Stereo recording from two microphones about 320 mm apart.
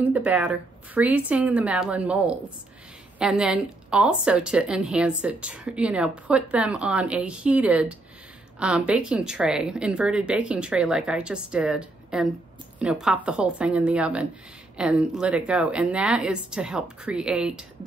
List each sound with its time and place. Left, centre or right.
0.0 s a woman's voice: centre